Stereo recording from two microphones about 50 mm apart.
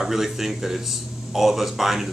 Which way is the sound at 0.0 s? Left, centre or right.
Centre.